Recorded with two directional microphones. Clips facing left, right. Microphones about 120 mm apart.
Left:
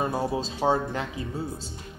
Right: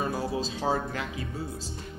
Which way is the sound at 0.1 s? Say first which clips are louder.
Left 2 dB; 25° left (ahead or behind).